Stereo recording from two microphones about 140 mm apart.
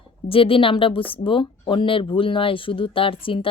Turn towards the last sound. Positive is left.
turn(degrees=40)  # may be behind; listen again after turning